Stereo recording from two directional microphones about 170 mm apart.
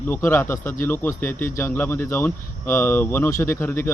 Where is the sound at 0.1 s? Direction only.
15° left (ahead or behind).